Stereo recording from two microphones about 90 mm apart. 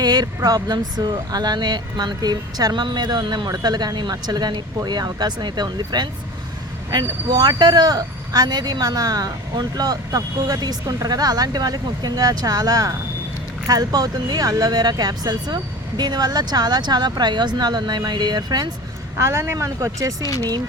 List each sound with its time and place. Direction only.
0.0 s vehicle: 50° right (ahead or behind)
0.3 s speech: 45° right (ahead or behind)
19.1 s speech: 30° right (ahead or behind)